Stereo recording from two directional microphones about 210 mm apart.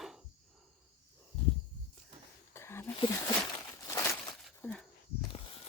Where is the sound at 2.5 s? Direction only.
10° left (ahead or behind).